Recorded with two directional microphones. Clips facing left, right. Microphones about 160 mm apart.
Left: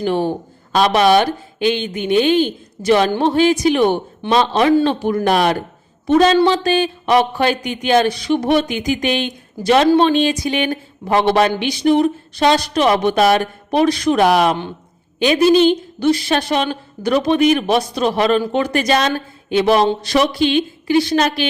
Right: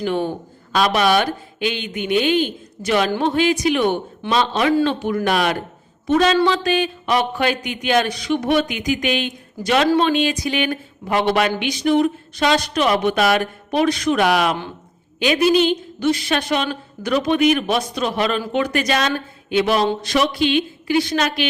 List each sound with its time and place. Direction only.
0.0 s speech: 30° left (ahead or behind)